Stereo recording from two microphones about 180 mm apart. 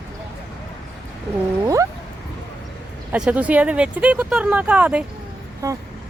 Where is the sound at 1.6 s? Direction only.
15° right (ahead or behind).